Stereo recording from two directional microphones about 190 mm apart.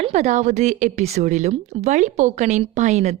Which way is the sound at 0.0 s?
35° right (ahead or behind).